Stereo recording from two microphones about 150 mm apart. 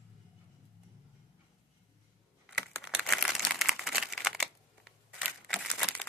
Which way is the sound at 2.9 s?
Centre (ahead or behind).